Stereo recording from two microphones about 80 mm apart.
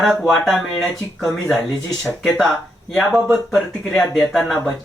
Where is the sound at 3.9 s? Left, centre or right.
Centre.